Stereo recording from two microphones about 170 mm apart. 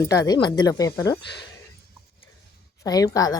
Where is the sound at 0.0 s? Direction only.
20° left (ahead or behind).